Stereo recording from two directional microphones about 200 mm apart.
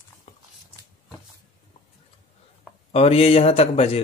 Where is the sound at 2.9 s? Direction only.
30° left (ahead or behind).